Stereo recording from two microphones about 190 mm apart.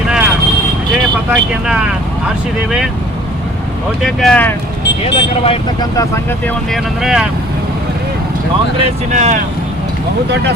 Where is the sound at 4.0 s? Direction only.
Centre (ahead or behind).